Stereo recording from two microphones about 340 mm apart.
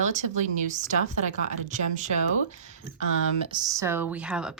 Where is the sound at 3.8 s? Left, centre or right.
Centre.